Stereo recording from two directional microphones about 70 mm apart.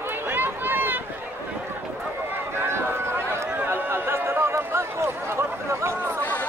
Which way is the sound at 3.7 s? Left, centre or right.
Right.